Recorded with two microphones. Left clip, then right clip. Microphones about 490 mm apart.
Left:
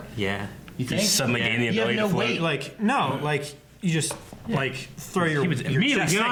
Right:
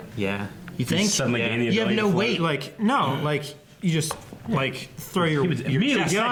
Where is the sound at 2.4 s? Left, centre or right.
Centre.